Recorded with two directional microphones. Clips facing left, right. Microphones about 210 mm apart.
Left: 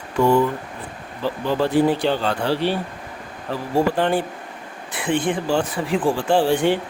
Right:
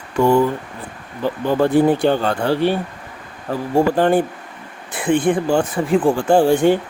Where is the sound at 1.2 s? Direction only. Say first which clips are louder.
Right 4 dB; 50° right (ahead or behind).